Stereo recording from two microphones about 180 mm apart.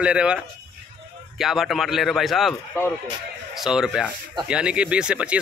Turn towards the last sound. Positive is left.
turn(degrees=-5)  # may be behind; listen again after turning